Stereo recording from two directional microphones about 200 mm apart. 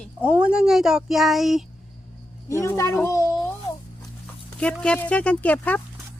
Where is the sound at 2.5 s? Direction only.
15° left (ahead or behind).